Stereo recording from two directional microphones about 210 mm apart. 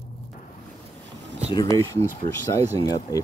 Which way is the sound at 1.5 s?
15° left (ahead or behind).